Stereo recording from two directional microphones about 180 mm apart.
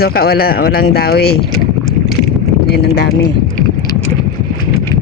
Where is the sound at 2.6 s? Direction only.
65° left (ahead or behind).